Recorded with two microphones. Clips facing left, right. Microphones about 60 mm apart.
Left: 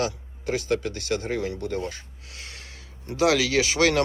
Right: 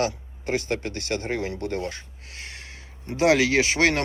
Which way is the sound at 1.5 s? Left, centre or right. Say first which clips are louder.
Right 1 dB; right.